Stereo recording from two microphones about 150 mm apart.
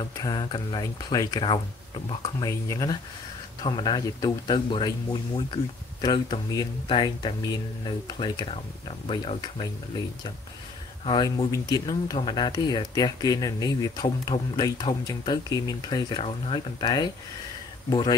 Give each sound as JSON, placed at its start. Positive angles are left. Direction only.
{"t": 0.0, "sound": "speech", "side_deg": 30}
{"t": 2.2, "sound": "speech", "side_deg": 25}
{"t": 11.1, "sound": "speech", "side_deg": 30}